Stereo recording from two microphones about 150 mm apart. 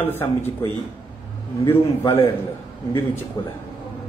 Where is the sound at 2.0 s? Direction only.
35° left (ahead or behind).